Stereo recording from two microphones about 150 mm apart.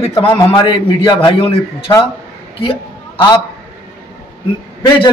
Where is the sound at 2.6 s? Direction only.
35° left (ahead or behind).